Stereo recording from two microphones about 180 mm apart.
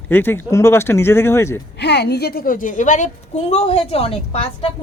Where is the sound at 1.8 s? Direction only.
70° left (ahead or behind).